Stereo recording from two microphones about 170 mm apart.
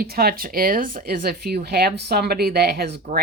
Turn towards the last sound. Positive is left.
turn(degrees=-70)  # may be behind; listen again after turning